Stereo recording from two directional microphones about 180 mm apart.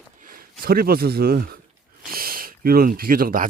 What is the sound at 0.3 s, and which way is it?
Speech, 55° right (ahead or behind).